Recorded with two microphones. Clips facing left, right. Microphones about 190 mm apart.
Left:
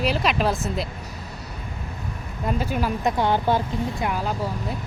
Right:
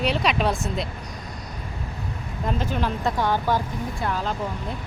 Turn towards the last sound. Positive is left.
turn(degrees=10)  # may be behind; listen again after turning